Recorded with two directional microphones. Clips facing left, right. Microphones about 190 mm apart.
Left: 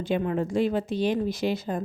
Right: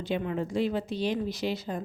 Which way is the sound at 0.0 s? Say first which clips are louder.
Left 4 dB; 50° left (ahead or behind).